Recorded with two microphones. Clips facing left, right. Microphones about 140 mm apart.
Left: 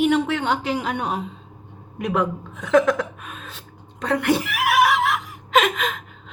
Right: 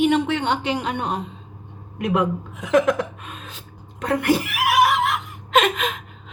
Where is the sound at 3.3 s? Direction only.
Centre (ahead or behind).